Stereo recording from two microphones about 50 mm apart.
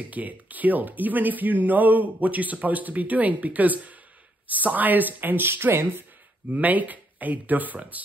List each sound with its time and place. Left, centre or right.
0.1 s speech: right
6.5 s speech: right